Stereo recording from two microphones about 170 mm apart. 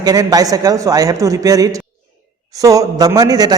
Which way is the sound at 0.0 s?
20° right (ahead or behind).